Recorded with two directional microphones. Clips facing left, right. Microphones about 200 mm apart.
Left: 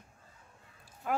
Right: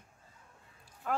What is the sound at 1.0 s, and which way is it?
Speech, 10° left (ahead or behind).